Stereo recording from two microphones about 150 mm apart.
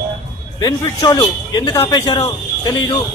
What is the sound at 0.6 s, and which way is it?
A man's voice, 25° left (ahead or behind).